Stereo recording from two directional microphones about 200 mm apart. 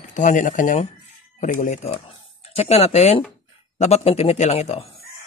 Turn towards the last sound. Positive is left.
turn(degrees=30)  # may be behind; listen again after turning